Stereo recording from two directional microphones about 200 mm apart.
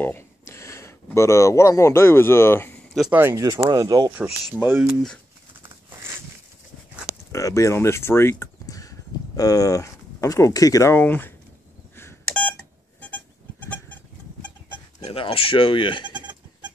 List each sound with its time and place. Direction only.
0.0 s speech: 10° left (ahead or behind); by 4.9 s 10° right (ahead or behind)
7.3 s speech: 15° left (ahead or behind)
11.9 s beep: 10° left (ahead or behind)
13.0 s goat: 10° left (ahead or behind)
15.0 s speech: 30° left (ahead or behind)